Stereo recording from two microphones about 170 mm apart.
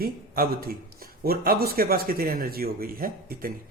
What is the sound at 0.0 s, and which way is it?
A man's voice, 60° right (ahead or behind).